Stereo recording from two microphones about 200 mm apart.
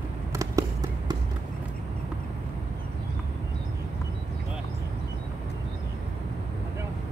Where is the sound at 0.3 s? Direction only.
15° right (ahead or behind).